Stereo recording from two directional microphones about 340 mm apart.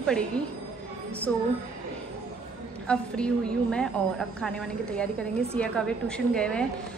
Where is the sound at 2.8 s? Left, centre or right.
Centre.